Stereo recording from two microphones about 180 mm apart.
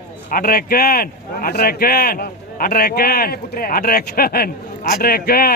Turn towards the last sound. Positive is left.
turn(degrees=55)  # may be behind; listen again after turning